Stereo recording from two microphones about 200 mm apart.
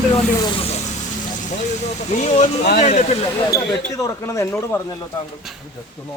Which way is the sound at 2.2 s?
35° left (ahead or behind).